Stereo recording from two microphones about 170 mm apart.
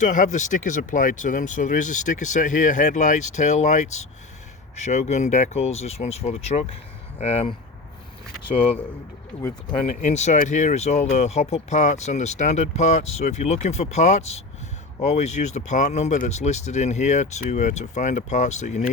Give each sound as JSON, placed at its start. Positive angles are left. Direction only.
{"t": 0.0, "sound": "speech", "side_deg": 45}
{"t": 10.0, "sound": "speech", "side_deg": 40}